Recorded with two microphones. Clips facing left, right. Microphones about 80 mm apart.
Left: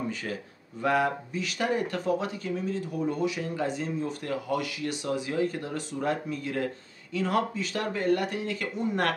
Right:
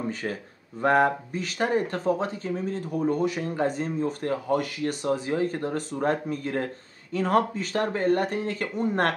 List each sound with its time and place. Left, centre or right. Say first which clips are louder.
0.1 s speech: right 3 dB; right